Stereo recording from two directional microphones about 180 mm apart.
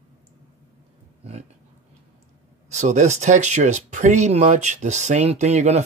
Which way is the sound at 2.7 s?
40° right (ahead or behind).